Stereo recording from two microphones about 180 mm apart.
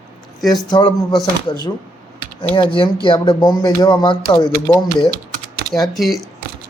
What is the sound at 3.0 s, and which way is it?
Speech, 30° left (ahead or behind).